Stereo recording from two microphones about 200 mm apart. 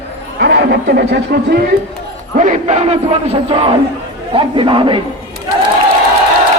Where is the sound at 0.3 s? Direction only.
55° right (ahead or behind).